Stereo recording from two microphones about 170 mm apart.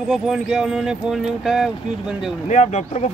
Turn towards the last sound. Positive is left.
turn(degrees=40)  # may be behind; listen again after turning